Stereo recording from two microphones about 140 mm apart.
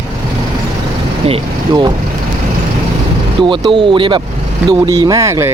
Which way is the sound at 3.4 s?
35° right (ahead or behind).